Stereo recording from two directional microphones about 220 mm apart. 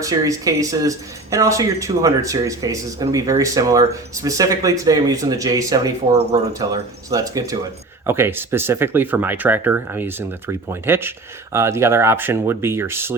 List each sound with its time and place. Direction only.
0.0 s speech: 15° right (ahead or behind)